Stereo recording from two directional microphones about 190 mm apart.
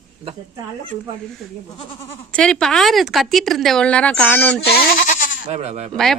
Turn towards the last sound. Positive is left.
turn(degrees=0)  # may be behind; listen again after turning